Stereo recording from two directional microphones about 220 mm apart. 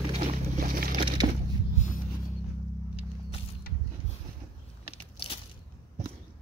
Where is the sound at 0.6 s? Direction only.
40° right (ahead or behind).